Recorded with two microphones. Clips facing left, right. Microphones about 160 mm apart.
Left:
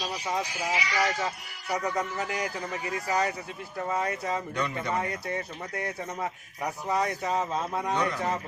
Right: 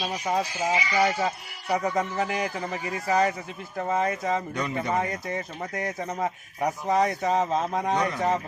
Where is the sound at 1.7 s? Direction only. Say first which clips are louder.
Right 4 dB; 30° right (ahead or behind).